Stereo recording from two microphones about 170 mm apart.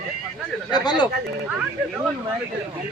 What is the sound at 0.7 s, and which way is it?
Speech, 25° left (ahead or behind).